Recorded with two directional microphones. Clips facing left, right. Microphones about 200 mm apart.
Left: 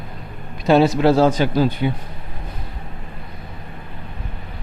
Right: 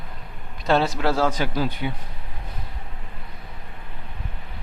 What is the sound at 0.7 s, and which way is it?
A man's voice, 15° left (ahead or behind).